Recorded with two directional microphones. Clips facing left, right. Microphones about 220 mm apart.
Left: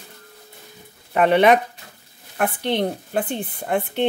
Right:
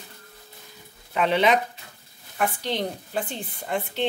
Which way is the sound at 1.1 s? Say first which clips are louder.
Left 6 dB; 55° left (ahead or behind).